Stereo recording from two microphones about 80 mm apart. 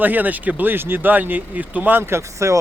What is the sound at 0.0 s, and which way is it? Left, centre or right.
A man's voice, right.